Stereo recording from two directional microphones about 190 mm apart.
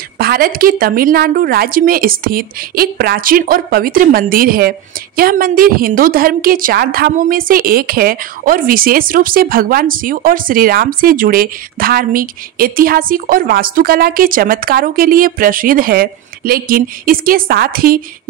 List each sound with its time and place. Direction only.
0.2 s a woman's voice: 50° right (ahead or behind)